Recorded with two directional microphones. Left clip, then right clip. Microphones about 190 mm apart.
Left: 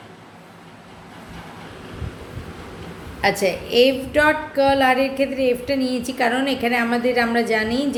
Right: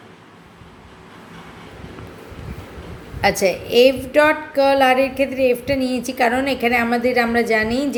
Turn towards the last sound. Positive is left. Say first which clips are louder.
# right 2 dB
turn(degrees=-25)  # may be behind; listen again after turning